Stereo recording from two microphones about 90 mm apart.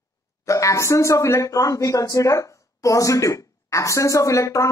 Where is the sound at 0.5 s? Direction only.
35° left (ahead or behind).